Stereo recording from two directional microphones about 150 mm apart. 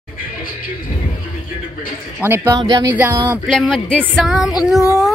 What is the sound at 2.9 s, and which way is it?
Speech, 15° right (ahead or behind).